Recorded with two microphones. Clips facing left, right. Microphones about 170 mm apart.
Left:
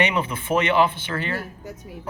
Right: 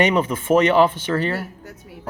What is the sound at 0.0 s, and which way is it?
Speech, 45° right (ahead or behind).